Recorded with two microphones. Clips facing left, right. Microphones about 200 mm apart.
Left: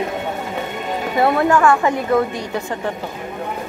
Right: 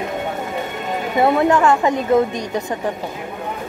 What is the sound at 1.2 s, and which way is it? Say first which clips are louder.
A woman's voice: even; 20° right (ahead or behind).